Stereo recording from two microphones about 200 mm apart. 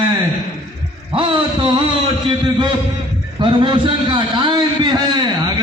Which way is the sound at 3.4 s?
25° right (ahead or behind).